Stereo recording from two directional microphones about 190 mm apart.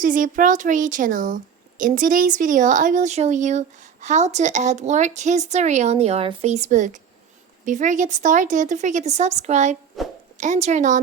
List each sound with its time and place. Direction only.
0.0 s speech: 45° right (ahead or behind)
10.0 s a woman's voice: centre (ahead or behind)
10.3 s speech: 40° right (ahead or behind)